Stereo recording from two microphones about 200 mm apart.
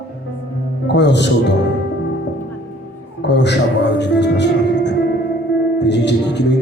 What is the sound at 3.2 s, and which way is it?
Speech, 60° left (ahead or behind).